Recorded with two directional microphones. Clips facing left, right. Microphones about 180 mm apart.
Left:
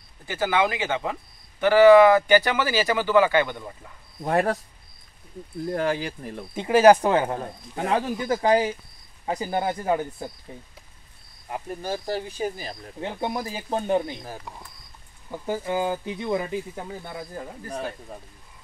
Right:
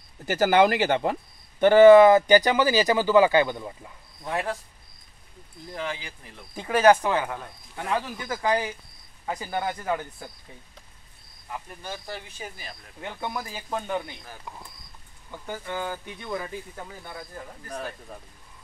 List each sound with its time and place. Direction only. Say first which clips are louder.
0.4 s speech: right 4 dB; 40° right (ahead or behind)
1.7 s speech: right 1 dB; 20° right (ahead or behind)
4.2 s speech: left 7 dB; 50° left (ahead or behind)
5.7 s speech: left 8 dB; 45° left (ahead or behind)
6.5 s speech: left 3 dB; 25° left (ahead or behind)
7.3 s speech: left 6 dB; 40° left (ahead or behind)
11.5 s speech: left 7 dB; 40° left (ahead or behind)
15.4 s speech: left 7 dB; 30° left (ahead or behind)
15.7 s speech: left 6 dB; 20° left (ahead or behind)